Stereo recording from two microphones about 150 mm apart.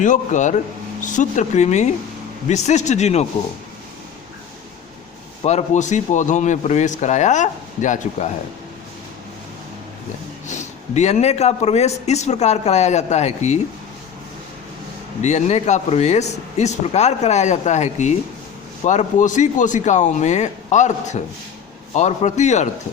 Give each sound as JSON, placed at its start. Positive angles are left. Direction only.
{"t": 0.0, "sound": "a man's voice", "side_deg": 55}
{"t": 5.4, "sound": "a man's voice", "side_deg": 45}
{"t": 10.5, "sound": "a man's voice", "side_deg": 50}
{"t": 15.2, "sound": "a man's voice", "side_deg": 50}